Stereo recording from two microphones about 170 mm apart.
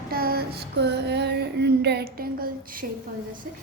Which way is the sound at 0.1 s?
60° right (ahead or behind).